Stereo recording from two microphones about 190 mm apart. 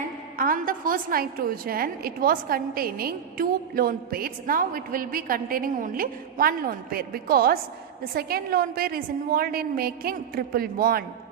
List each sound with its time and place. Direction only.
0.3 s a woman's voice: 45° right (ahead or behind)